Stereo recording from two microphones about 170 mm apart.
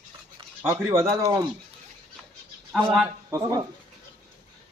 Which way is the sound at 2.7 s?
5° right (ahead or behind).